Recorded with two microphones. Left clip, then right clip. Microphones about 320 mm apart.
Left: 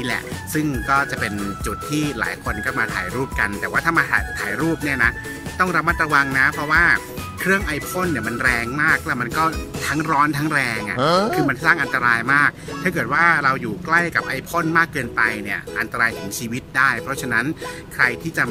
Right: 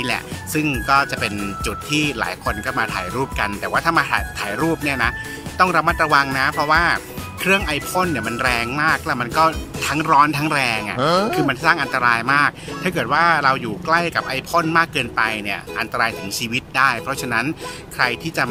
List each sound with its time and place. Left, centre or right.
0.0 s speech: centre